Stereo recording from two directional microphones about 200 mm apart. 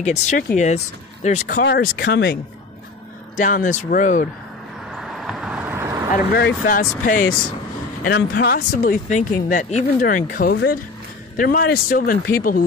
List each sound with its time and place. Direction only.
0.0 s speech: 35° left (ahead or behind)
1.6 s speech: 50° left (ahead or behind)
3.3 s speech: 40° left (ahead or behind)
4.9 s vehicle: centre (ahead or behind)
6.1 s speech: 50° left (ahead or behind)
8.1 s speech: 50° left (ahead or behind)